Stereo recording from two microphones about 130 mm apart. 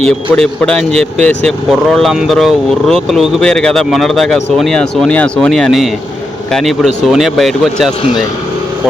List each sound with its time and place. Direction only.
0.0 s speech: 5° left (ahead or behind)